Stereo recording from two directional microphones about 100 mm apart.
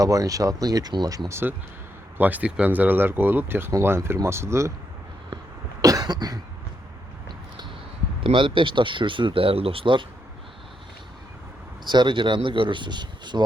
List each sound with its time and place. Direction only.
0.0 s speech: 35° right (ahead or behind)
1.3 s speech: 25° right (ahead or behind)
5.8 s cough: 40° right (ahead or behind)
8.2 s speech: 60° right (ahead or behind)
11.9 s speech: 50° right (ahead or behind)